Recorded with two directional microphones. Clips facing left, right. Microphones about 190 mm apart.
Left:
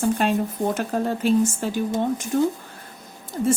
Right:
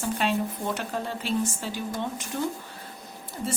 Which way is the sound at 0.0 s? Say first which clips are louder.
Left 5 dB; 45° left (ahead or behind).